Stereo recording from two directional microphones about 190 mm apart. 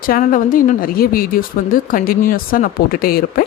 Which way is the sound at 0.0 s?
45° left (ahead or behind).